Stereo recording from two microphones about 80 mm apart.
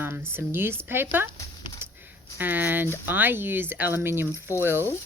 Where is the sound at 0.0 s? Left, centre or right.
Right.